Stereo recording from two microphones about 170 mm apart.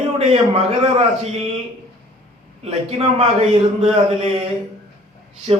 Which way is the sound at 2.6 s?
40° right (ahead or behind).